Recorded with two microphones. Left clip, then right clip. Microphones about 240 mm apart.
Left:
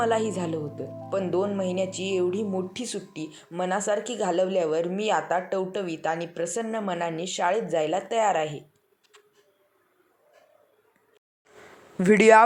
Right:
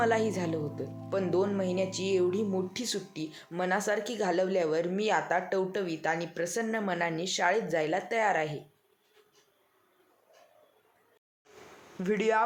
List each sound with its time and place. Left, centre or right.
0.0 s speech: centre
11.9 s speech: left